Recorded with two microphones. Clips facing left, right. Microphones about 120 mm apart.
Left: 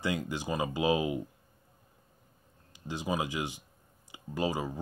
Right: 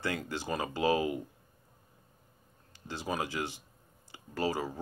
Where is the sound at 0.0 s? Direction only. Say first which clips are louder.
Left 2 dB; 15° left (ahead or behind).